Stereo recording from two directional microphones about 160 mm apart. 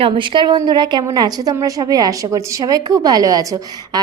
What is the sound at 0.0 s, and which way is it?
A woman's voice, 30° right (ahead or behind).